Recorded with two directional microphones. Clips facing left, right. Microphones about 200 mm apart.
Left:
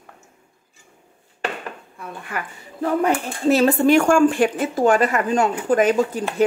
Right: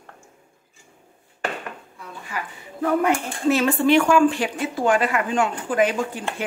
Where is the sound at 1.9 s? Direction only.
55° left (ahead or behind).